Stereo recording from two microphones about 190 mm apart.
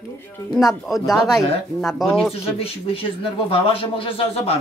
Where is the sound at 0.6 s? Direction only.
Centre (ahead or behind).